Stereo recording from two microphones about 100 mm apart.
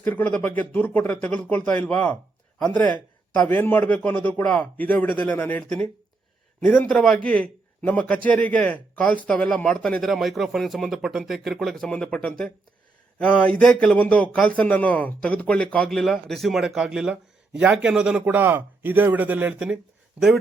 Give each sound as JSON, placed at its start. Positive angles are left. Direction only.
{"t": 0.0, "sound": "a man's voice", "side_deg": 15}
{"t": 3.5, "sound": "a man's voice", "side_deg": 20}
{"t": 10.0, "sound": "a man's voice", "side_deg": 0}
{"t": 18.3, "sound": "speech", "side_deg": -20}